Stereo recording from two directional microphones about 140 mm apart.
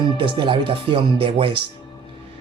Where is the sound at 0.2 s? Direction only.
35° right (ahead or behind).